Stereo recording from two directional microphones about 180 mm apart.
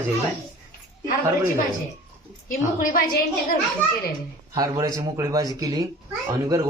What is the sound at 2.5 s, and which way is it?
Speech, 50° left (ahead or behind).